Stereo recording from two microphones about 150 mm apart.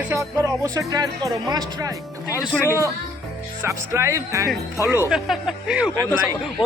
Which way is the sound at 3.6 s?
20° right (ahead or behind).